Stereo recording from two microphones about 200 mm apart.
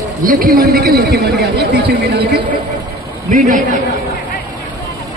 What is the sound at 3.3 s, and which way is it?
Speech, 40° right (ahead or behind).